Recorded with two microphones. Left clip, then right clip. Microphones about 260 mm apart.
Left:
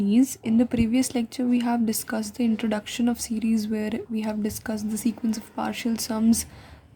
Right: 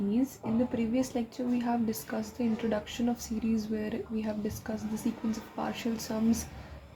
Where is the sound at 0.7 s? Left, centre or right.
Left.